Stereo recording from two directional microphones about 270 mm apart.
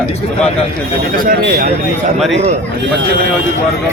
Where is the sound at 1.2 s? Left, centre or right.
Right.